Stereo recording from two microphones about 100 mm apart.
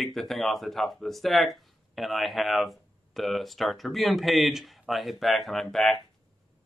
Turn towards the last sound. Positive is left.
turn(degrees=0)  # may be behind; listen again after turning